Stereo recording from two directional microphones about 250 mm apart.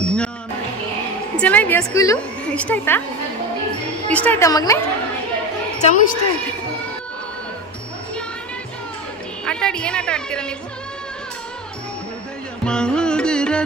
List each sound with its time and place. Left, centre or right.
0.0 s music: centre
1.4 s a woman's voice: centre
4.1 s a woman's voice: centre
5.8 s speech: left
9.5 s a woman's voice: centre
12.6 s carnatic music: centre